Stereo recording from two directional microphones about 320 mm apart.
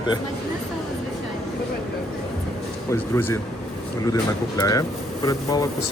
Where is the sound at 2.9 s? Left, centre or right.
Centre.